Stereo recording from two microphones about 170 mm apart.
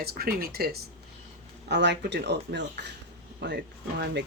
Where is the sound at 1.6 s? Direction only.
90° right.